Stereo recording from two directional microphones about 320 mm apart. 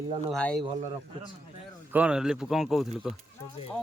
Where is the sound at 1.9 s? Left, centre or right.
Centre.